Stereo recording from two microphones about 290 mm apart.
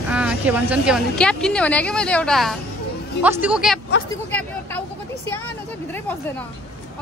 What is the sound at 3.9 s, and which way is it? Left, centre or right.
Speech, left.